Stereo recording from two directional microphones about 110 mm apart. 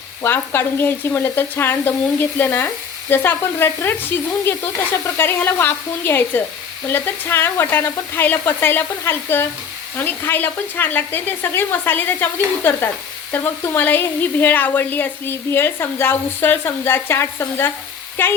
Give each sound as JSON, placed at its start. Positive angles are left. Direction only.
{"t": 0.2, "sound": "speech", "side_deg": 20}